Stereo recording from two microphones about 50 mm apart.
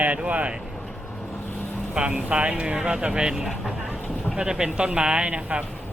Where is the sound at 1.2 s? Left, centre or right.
Left.